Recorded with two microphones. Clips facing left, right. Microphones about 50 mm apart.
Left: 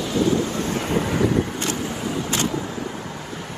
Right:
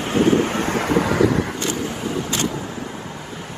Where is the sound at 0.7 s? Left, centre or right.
Right.